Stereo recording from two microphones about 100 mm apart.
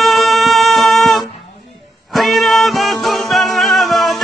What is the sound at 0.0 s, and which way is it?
Music, centre (ahead or behind).